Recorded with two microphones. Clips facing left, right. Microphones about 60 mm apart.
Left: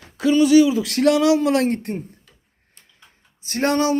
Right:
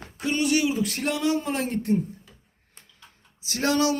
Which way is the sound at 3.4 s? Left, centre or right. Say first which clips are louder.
Left 4 dB; left.